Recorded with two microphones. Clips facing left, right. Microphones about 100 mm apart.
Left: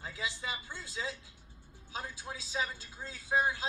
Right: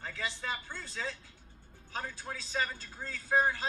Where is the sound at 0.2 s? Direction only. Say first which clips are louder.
Right 2 dB; 50° right (ahead or behind).